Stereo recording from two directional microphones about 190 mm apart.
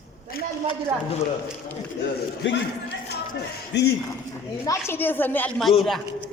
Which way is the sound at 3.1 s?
60° left (ahead or behind).